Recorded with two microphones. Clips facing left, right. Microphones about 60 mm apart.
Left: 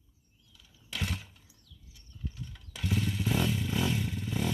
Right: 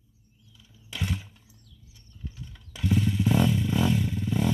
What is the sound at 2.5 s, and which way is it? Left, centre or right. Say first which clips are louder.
Motorcycle: right 7 dB; centre.